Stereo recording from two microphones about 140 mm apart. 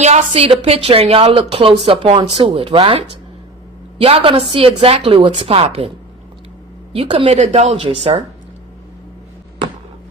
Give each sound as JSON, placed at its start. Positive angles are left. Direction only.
{"t": 0.0, "sound": "a woman's voice", "side_deg": -50}
{"t": 6.9, "sound": "a woman's voice", "side_deg": -40}
{"t": 7.3, "sound": "a woman's voice", "side_deg": -55}